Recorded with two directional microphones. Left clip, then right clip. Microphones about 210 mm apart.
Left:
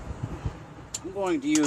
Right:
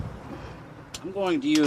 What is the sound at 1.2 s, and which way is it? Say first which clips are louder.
Speech: right 2 dB; 35° right (ahead or behind).